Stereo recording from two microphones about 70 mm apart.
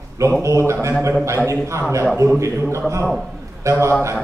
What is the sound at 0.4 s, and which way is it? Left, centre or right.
A man's voice, right.